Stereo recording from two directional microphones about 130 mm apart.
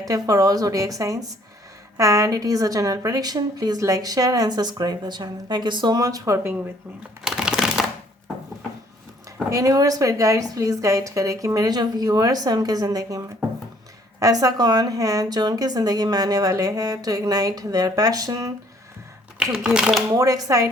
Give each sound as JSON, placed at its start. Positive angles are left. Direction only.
{"t": 0.0, "sound": "a woman's voice", "side_deg": -25}
{"t": 7.3, "sound": "a sound", "side_deg": -5}
{"t": 9.5, "sound": "a woman's voice", "side_deg": -25}
{"t": 19.6, "sound": "speech", "side_deg": -5}
{"t": 20.1, "sound": "a woman's voice", "side_deg": -25}